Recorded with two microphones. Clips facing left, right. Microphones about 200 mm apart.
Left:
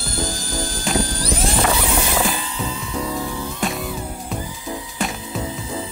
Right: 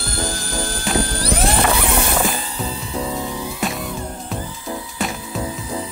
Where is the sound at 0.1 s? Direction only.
65° right (ahead or behind).